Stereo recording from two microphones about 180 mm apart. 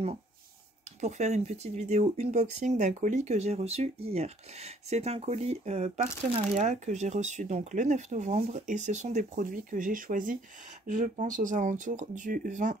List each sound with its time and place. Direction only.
1.0 s speech: 40° right (ahead or behind)